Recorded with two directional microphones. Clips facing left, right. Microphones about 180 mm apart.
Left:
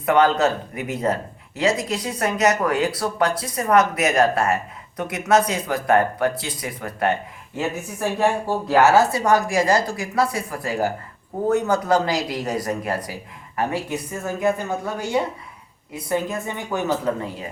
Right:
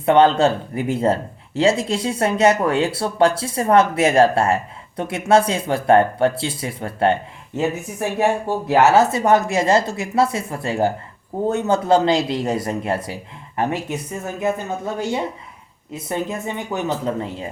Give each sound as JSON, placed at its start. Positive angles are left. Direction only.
{"t": 0.0, "sound": "speech", "side_deg": -30}
{"t": 15.9, "sound": "speech", "side_deg": -25}